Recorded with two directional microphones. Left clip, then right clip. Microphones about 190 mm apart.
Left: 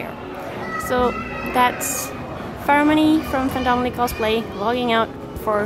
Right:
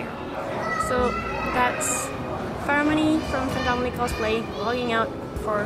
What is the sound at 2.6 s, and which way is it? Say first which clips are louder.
A woman's voice: left 6 dB; 35° left (ahead or behind).